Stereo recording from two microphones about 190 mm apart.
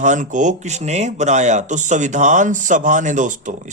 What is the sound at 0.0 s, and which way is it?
Speech, 40° right (ahead or behind).